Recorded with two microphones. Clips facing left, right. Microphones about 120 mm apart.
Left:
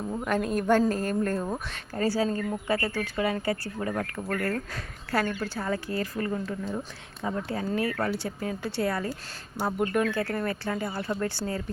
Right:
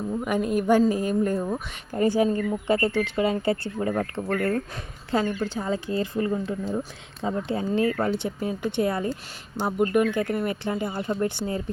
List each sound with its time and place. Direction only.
0.3 s a woman's voice: 10° right (ahead or behind)
9.7 s speech: 10° right (ahead or behind)